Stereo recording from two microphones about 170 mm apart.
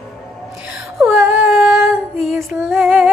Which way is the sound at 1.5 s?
5° right (ahead or behind).